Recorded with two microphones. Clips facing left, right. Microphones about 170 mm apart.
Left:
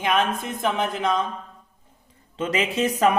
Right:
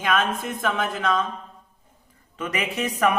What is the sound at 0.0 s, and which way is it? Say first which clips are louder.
Speech: left 1 dB; 20° left (ahead or behind).